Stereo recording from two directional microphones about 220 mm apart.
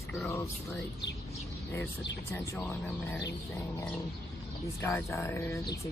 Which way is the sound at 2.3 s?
10° left (ahead or behind).